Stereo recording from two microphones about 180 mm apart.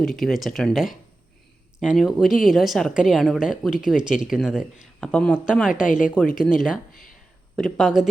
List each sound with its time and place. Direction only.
0.0 s speech: centre (ahead or behind)
5.7 s speech: 45° left (ahead or behind)
6.4 s speech: 5° right (ahead or behind)